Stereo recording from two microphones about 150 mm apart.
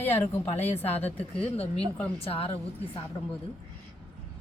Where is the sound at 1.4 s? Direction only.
40° left (ahead or behind).